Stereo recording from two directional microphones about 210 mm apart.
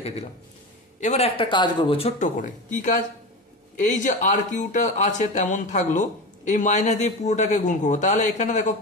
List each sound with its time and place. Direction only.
1.0 s speech: 30° left (ahead or behind)